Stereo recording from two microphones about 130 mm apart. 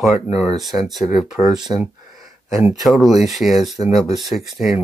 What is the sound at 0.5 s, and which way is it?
Speech, centre (ahead or behind).